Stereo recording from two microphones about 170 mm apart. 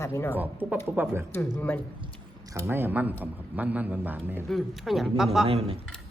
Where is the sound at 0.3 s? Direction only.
10° right (ahead or behind).